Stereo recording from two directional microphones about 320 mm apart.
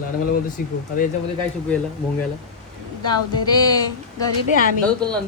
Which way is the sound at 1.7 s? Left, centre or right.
Centre.